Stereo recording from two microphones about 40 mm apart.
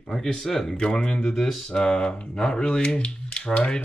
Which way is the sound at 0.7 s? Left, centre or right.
Left.